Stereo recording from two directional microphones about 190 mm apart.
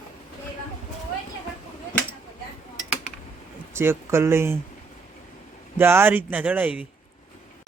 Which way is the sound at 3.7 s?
15° right (ahead or behind).